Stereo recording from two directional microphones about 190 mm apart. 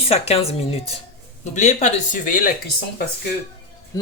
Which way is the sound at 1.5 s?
40° left (ahead or behind).